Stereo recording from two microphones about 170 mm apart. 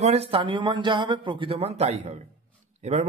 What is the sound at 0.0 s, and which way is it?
A man's voice, 35° right (ahead or behind).